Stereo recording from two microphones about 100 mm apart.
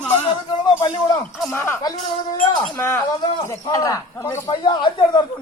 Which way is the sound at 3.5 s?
35° left (ahead or behind).